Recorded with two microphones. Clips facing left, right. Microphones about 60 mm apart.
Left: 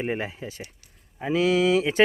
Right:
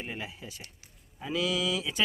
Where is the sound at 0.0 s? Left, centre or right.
Left.